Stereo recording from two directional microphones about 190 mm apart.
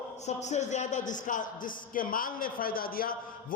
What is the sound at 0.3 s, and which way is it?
A man's voice, 35° left (ahead or behind).